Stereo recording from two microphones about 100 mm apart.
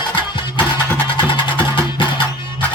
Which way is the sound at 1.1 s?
50° left (ahead or behind).